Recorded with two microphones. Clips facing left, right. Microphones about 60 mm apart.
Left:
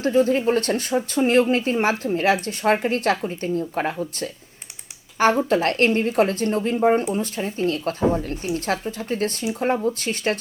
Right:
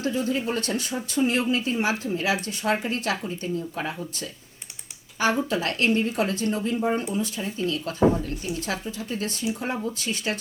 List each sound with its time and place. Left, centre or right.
0.0 s a woman's voice: left
5.5 s a woman's voice: left
6.7 s a woman's voice: left